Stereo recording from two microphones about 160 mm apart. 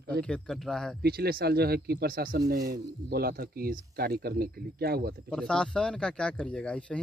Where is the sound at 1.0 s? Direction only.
75° right (ahead or behind).